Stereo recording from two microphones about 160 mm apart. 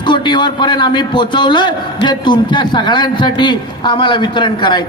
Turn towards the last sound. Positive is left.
turn(degrees=30)  # may be behind; listen again after turning